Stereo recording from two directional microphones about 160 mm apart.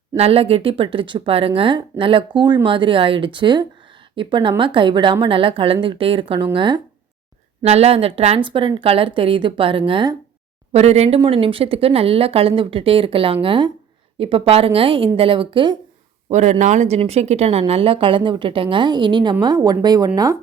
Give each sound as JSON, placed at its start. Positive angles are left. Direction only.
{"t": 0.2, "sound": "speech", "side_deg": -40}
{"t": 7.6, "sound": "speech", "side_deg": -40}
{"t": 10.7, "sound": "speech", "side_deg": -40}
{"t": 16.3, "sound": "speech", "side_deg": -50}